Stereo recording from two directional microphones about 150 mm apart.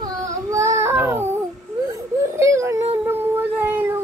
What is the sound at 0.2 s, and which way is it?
Child singing, 20° right (ahead or behind).